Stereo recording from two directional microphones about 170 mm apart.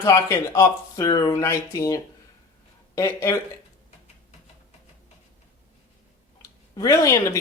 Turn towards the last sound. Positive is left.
turn(degrees=20)  # may be behind; listen again after turning